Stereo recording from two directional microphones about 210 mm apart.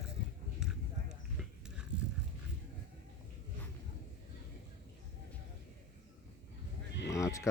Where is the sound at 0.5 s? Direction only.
5° right (ahead or behind).